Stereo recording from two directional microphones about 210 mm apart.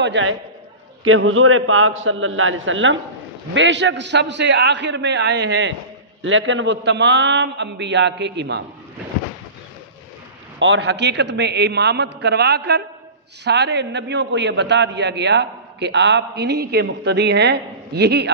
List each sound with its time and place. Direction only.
0.0 s a man's voice: 60° right (ahead or behind)
10.6 s a man's voice: 60° right (ahead or behind)